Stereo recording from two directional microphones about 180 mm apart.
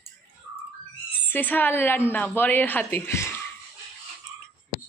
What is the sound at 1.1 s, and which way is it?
A woman's voice, 10° left (ahead or behind).